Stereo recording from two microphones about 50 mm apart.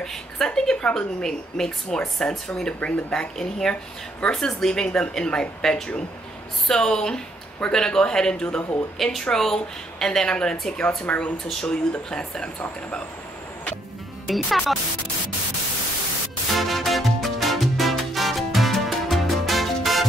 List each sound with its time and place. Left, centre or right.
0.0 s a woman's voice: centre
8.9 s a woman's voice: centre
14.2 s speech: centre
16.5 s music: centre